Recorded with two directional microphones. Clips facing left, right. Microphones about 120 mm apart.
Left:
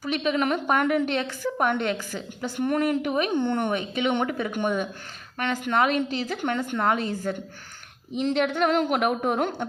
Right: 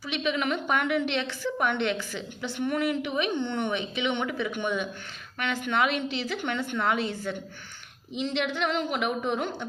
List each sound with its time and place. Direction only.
0.0 s a woman's voice: 40° left (ahead or behind)